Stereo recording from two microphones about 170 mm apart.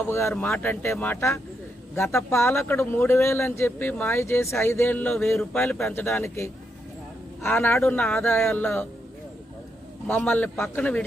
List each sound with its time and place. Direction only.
0.1 s speech: 15° left (ahead or behind)
10.1 s speech: 10° left (ahead or behind)